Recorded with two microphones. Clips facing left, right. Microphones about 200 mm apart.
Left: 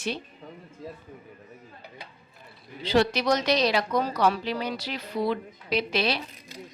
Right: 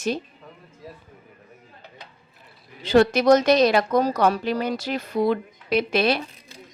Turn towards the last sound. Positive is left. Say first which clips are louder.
# right 6 dB
turn(degrees=-50)  # may be behind; listen again after turning